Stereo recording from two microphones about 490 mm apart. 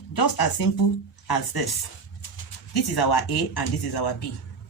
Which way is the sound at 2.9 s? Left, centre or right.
Left.